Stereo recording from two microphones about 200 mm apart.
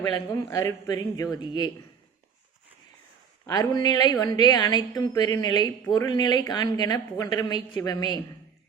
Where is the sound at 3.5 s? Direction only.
20° left (ahead or behind).